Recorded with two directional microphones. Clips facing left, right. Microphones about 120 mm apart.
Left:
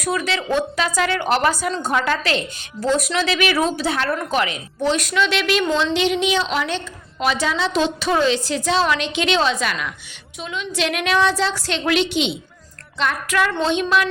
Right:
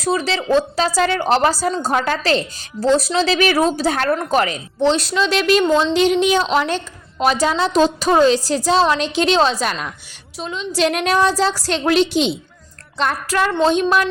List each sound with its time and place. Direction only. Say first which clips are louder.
0.0 s a woman's voice: right 3 dB; 30° right (ahead or behind)